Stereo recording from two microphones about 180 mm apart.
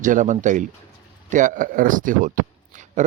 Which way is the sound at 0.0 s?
45° right (ahead or behind).